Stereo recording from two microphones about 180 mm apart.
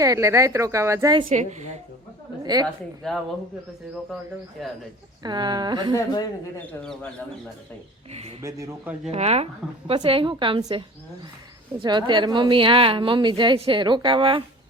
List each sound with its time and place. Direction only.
0.0 s a woman's voice: 20° right (ahead or behind)
1.3 s a woman's voice: 40° right (ahead or behind)
2.4 s a woman's voice: 20° right (ahead or behind)
3.0 s speech: 5° left (ahead or behind)
4.6 s speech: centre (ahead or behind)
5.2 s a woman's voice: 25° right (ahead or behind)
5.9 s speech: 20° left (ahead or behind)
6.7 s speech: 5° left (ahead or behind)
8.1 s a woman's voice: 35° right (ahead or behind)
8.4 s a woman's voice: 20° right (ahead or behind)
9.0 s a woman's voice: 35° right (ahead or behind)